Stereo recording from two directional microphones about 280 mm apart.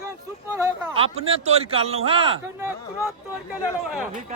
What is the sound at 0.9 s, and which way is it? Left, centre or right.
Speech, right.